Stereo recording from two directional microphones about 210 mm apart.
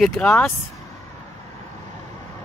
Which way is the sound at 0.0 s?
Centre (ahead or behind).